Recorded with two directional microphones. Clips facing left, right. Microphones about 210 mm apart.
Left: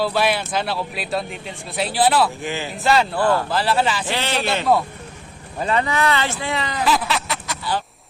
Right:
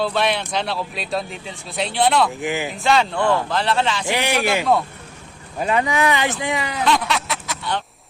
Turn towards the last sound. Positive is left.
turn(degrees=0)  # may be behind; listen again after turning